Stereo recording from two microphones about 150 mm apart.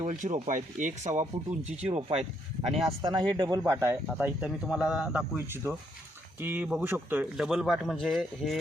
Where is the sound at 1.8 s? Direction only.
40° right (ahead or behind); by 3.9 s 20° right (ahead or behind).